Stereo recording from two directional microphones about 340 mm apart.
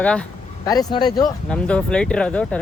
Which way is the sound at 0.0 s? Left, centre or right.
Centre.